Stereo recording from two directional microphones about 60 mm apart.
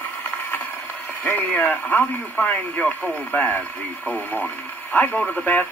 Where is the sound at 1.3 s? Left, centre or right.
Left.